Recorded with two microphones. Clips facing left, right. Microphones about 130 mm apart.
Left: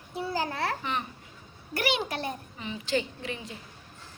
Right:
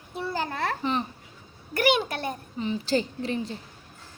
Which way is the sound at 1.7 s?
50° right (ahead or behind).